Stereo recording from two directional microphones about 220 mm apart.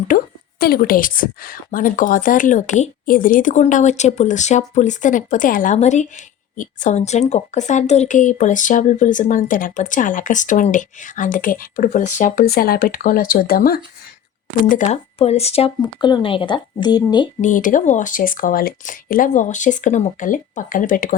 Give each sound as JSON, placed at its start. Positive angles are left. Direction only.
{"t": 0.6, "sound": "a woman's voice", "side_deg": 40}
{"t": 17.4, "sound": "a woman's voice", "side_deg": 35}